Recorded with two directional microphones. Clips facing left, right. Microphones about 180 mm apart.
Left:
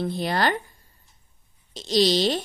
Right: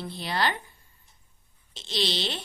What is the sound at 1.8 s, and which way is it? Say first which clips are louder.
Speech: left 10 dB; 40° left (ahead or behind).